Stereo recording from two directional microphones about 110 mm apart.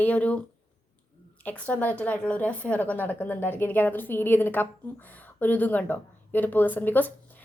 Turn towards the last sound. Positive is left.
turn(degrees=15)  # may be behind; listen again after turning